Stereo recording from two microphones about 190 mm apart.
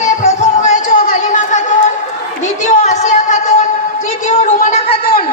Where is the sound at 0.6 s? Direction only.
40° left (ahead or behind).